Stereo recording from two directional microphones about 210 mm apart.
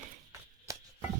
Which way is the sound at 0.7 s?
15° right (ahead or behind).